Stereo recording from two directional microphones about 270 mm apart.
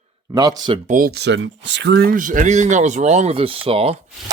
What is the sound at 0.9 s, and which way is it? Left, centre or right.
Speech, right.